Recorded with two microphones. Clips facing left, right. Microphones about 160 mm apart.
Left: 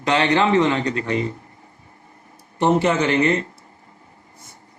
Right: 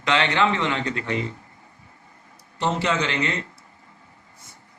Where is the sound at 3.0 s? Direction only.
45° left (ahead or behind).